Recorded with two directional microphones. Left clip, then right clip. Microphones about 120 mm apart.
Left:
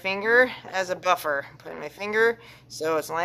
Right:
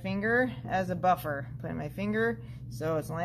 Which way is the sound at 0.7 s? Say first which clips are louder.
Left 1 dB; 20° left (ahead or behind).